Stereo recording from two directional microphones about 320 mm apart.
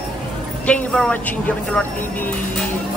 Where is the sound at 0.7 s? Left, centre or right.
Centre.